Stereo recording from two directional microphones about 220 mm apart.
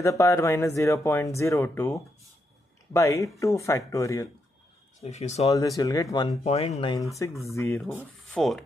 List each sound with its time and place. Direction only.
0.0 s speech: 15° left (ahead or behind)
5.0 s speech: 30° left (ahead or behind)
5.5 s speech: 15° left (ahead or behind)
7.5 s speech: 10° left (ahead or behind)